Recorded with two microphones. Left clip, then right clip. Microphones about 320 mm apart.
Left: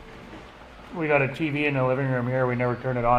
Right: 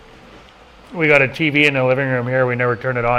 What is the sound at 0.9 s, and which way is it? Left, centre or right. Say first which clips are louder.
A man's voice: right 9 dB; right.